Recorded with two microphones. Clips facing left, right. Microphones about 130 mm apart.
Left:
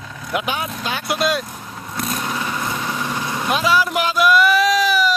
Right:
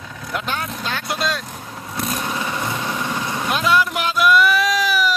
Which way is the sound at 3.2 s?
Centre (ahead or behind).